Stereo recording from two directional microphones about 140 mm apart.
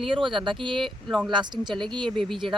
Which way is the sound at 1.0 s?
Centre (ahead or behind).